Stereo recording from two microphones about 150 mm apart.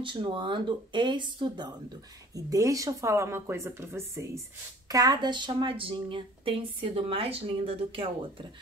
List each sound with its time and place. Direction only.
0.0 s speech: 35° right (ahead or behind)